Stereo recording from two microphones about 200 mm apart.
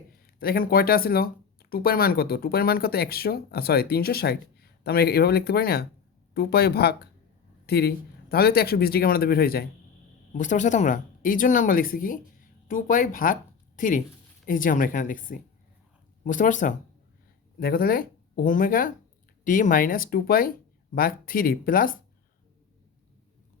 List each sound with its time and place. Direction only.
0.3 s speech: 45° left (ahead or behind)
10.3 s a woman's voice: 40° left (ahead or behind)